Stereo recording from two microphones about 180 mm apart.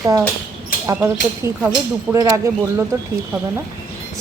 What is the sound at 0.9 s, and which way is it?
Speech, 15° right (ahead or behind).